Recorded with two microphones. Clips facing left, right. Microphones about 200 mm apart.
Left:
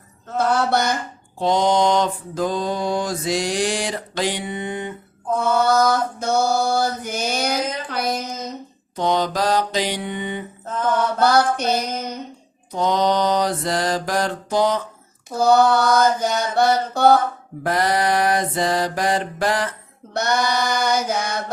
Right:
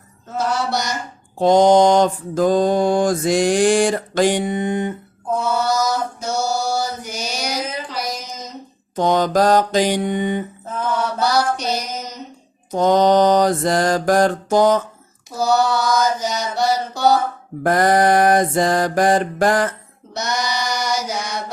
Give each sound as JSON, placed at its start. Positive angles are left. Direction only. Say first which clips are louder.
{"t": 0.3, "sound": "chant", "louder": "left 2 dB", "side_deg": 55}
{"t": 1.4, "sound": "mantra", "louder": "right 6 dB", "side_deg": -45}
{"t": 5.4, "sound": "mantra", "louder": "left 3 dB", "side_deg": 55}
{"t": 9.0, "sound": "mantra", "louder": "right 4 dB", "side_deg": -45}
{"t": 10.9, "sound": "mantra", "louder": "left 2 dB", "side_deg": 55}
{"t": 12.7, "sound": "mantra", "louder": "right 5 dB", "side_deg": -50}
{"t": 15.3, "sound": "chant", "louder": "left 2 dB", "side_deg": 55}
{"t": 17.6, "sound": "mantra", "louder": "right 5 dB", "side_deg": -50}
{"t": 20.1, "sound": "chant", "louder": "left 3 dB", "side_deg": 55}